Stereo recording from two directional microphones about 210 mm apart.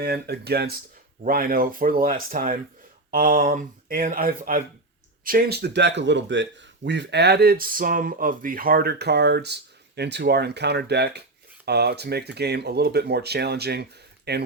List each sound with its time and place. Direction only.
0.0 s speech: 50° right (ahead or behind)